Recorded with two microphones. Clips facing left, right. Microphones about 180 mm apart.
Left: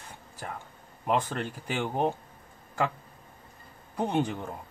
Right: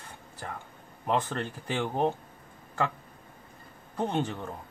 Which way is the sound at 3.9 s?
10° left (ahead or behind).